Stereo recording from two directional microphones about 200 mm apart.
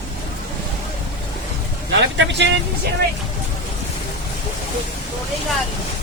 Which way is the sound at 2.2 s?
65° right (ahead or behind).